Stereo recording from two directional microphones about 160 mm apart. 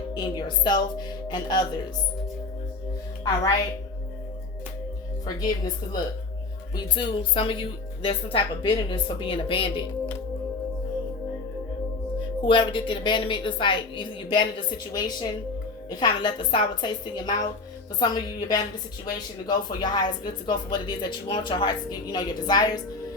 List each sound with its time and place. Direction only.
0.1 s speech: 30° left (ahead or behind)
5.2 s a woman's voice: 25° left (ahead or behind)
12.5 s a woman's voice: 30° left (ahead or behind)